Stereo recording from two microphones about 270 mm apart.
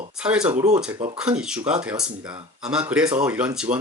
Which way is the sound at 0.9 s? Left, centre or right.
Right.